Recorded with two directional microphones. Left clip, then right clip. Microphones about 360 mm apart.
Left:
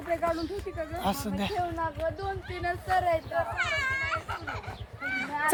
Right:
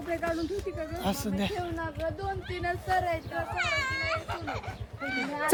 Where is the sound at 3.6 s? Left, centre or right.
Centre.